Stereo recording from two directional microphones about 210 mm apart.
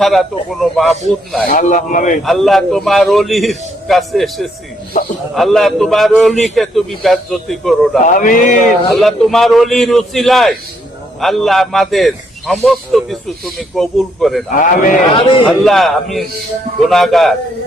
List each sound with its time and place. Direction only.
0.0 s a man's voice: centre (ahead or behind)
1.5 s a man's voice: 40° left (ahead or behind)
2.2 s a man's voice: centre (ahead or behind)
8.0 s a man's voice: 40° left (ahead or behind)
9.0 s a man's voice: centre (ahead or behind)
14.5 s a man's voice: 40° left (ahead or behind)
15.1 s speech: 25° left (ahead or behind)
15.6 s a man's voice: centre (ahead or behind)